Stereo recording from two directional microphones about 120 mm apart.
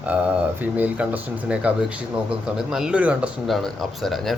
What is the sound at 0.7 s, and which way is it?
Speech, 15° right (ahead or behind).